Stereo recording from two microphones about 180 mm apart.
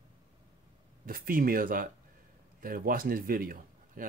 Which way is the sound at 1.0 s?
50° right (ahead or behind).